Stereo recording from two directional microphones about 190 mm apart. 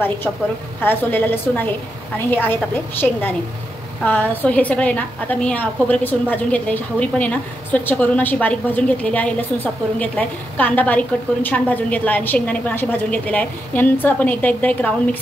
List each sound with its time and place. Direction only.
0.8 s a woman's voice: 10° left (ahead or behind)